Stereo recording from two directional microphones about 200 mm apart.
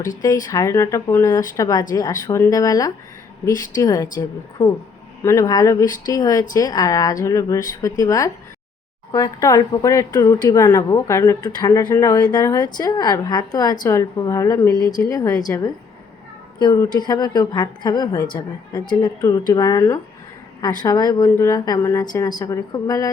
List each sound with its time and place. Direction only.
0.4 s a woman's voice: 15° left (ahead or behind)